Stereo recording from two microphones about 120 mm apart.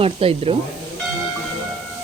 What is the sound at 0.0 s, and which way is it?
Speech, 50° right (ahead or behind).